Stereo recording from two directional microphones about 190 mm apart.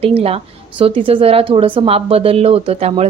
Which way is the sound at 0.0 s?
30° right (ahead or behind).